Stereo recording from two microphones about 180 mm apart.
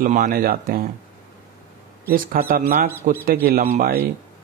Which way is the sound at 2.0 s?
55° right (ahead or behind).